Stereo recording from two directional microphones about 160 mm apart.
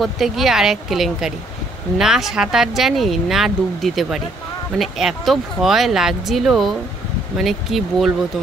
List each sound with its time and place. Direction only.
0.0 s speech: centre (ahead or behind)